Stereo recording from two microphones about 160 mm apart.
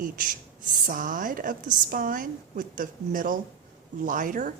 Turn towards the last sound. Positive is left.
turn(degrees=-55)  # may be behind; listen again after turning